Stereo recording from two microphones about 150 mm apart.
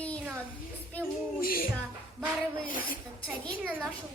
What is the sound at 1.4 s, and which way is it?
Music, 75° left (ahead or behind).